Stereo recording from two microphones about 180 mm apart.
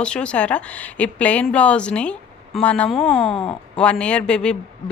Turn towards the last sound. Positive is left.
turn(degrees=5)  # may be behind; listen again after turning